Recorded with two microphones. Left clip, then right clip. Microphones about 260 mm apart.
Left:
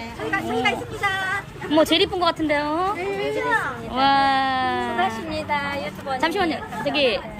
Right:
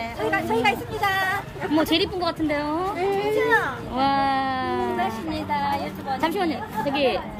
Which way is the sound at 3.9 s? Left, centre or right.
Centre.